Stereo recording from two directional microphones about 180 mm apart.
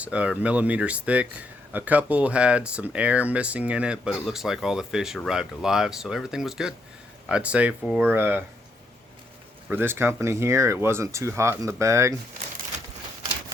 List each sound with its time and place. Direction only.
0.0 s speech: 5° right (ahead or behind)
9.6 s speech: 10° right (ahead or behind)